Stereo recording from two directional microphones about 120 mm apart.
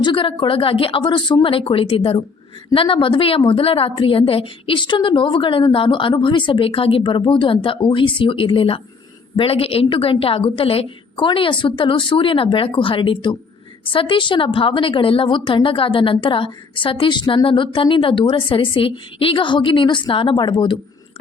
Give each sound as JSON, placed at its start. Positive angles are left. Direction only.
{"t": 0.0, "sound": "a woman's voice", "side_deg": 45}